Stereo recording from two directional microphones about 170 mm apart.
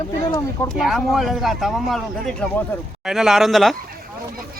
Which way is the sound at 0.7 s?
Centre (ahead or behind).